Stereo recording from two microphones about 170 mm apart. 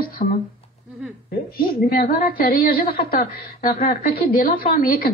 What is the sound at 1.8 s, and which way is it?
A woman's voice, 60° left (ahead or behind).